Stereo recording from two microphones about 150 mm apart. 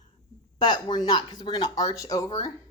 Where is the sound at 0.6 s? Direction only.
30° left (ahead or behind).